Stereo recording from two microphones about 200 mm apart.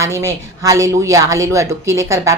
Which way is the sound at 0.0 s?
15° right (ahead or behind).